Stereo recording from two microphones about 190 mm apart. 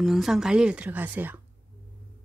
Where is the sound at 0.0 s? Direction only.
Centre (ahead or behind).